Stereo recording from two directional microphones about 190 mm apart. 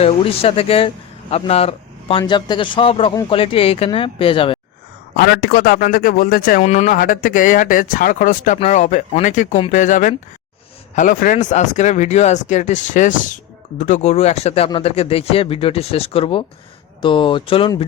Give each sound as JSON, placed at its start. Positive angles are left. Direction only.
{"t": 0.0, "sound": "speech", "side_deg": 30}
{"t": 5.1, "sound": "a man's voice", "side_deg": 55}